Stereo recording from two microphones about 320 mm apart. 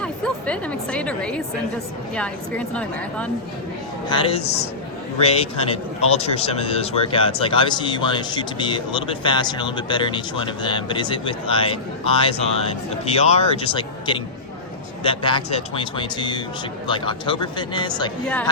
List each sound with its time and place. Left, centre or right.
0.0 s a woman's voice: centre
4.1 s speech: centre